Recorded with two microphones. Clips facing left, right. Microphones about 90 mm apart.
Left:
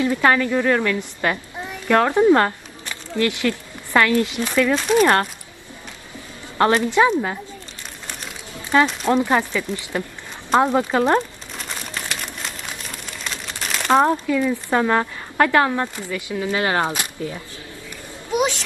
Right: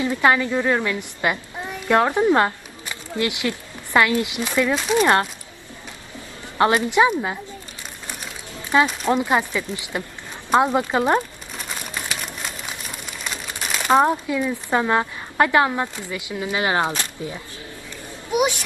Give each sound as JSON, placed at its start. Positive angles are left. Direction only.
{"t": 0.0, "sound": "a woman's voice", "side_deg": -15}
{"t": 6.6, "sound": "speech", "side_deg": -10}
{"t": 8.7, "sound": "speech", "side_deg": -10}
{"t": 10.5, "sound": "crumpling", "side_deg": -10}
{"t": 14.3, "sound": "speech", "side_deg": -15}
{"t": 18.3, "sound": "a sound", "side_deg": -10}